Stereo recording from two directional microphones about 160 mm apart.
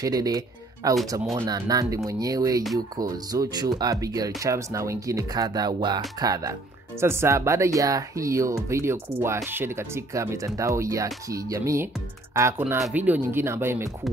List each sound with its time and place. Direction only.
0.0 s speech: 25° right (ahead or behind)